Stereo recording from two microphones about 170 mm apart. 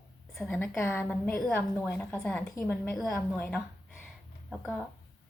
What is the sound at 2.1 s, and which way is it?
Speech, 5° left (ahead or behind).